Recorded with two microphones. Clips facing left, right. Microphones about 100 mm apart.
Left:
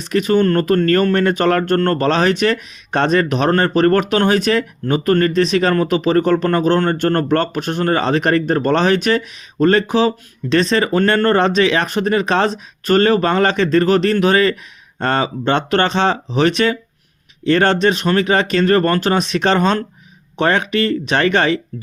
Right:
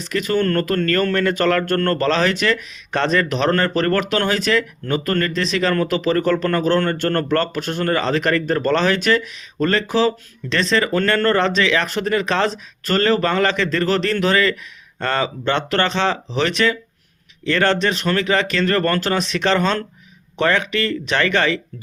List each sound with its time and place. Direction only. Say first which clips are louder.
0.3 s speech: left 4 dB; 20° left (ahead or behind)